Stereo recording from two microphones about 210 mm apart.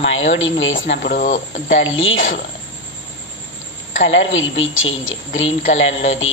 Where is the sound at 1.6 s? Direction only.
65° left (ahead or behind).